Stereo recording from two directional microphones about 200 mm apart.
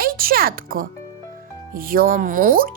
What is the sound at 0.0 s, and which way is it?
Speech, 50° right (ahead or behind).